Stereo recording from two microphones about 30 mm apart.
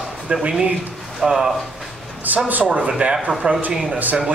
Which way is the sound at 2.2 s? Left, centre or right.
Right.